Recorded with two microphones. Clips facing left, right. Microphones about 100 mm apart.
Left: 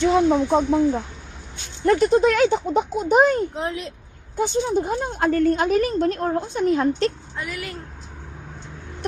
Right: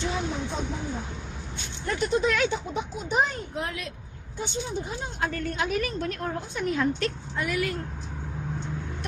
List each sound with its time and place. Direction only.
0.0 s speech: 70° left (ahead or behind)
1.8 s speech: 50° left (ahead or behind)
3.5 s speech: 25° left (ahead or behind)
4.4 s a woman's voice: 50° left (ahead or behind); by 7.1 s 35° left (ahead or behind)
7.3 s speech: centre (ahead or behind)